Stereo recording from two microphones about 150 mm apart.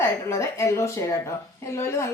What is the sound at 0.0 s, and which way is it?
A woman's voice, 20° left (ahead or behind).